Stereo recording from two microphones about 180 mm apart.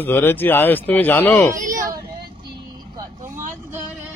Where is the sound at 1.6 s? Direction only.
45° right (ahead or behind).